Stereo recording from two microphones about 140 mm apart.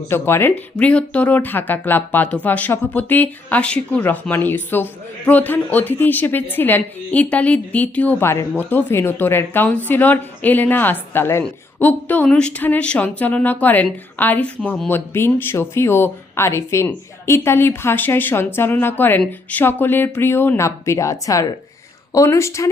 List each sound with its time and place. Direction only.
0.1 s speech: 15° left (ahead or behind)